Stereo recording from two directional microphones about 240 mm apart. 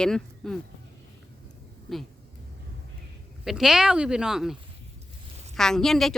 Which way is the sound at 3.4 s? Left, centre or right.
Centre.